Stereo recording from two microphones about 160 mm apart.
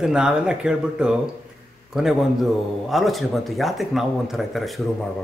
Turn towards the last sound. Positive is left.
turn(degrees=0)  # may be behind; listen again after turning